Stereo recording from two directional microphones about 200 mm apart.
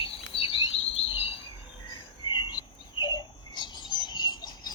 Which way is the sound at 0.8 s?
70° left (ahead or behind).